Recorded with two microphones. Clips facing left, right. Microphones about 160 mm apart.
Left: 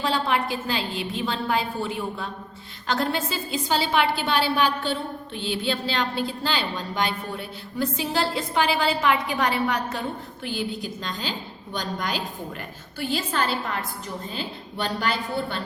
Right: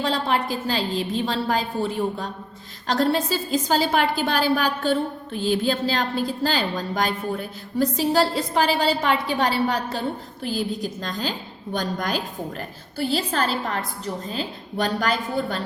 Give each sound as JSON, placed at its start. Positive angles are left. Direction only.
{"t": 0.0, "sound": "a woman's voice", "side_deg": -35}